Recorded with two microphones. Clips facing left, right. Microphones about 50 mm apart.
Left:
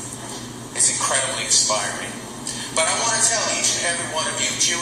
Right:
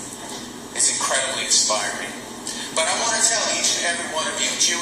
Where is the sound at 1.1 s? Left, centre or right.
Left.